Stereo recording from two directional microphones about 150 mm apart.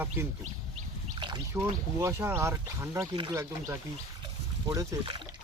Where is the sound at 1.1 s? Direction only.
30° right (ahead or behind).